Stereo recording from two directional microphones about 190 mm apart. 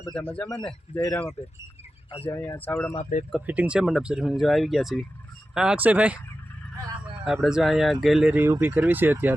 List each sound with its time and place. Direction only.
0.1 s speech: 5° left (ahead or behind)
2.2 s speech: 10° left (ahead or behind)
3.0 s speech: 40° left (ahead or behind)
3.3 s speech: 10° right (ahead or behind)
7.4 s speech: centre (ahead or behind)